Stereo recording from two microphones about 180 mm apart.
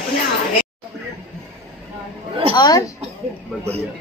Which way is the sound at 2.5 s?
25° left (ahead or behind).